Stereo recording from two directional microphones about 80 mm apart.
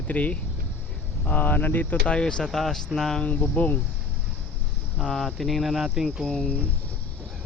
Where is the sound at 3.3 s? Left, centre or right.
Centre.